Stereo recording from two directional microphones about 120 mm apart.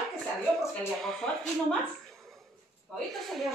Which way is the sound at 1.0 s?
5° left (ahead or behind).